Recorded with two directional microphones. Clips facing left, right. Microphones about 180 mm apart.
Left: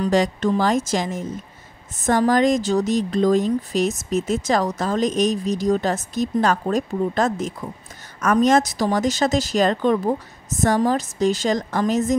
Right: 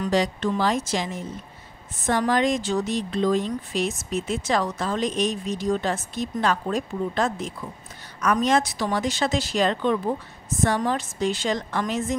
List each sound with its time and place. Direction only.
0.1 s a woman's voice: 45° left (ahead or behind)